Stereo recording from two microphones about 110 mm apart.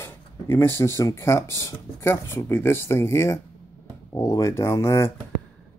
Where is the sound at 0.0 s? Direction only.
20° left (ahead or behind).